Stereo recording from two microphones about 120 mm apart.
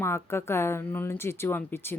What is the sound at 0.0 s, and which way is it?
A woman's voice, 20° left (ahead or behind).